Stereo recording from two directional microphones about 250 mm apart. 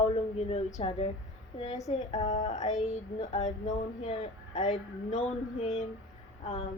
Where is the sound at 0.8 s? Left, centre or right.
Left.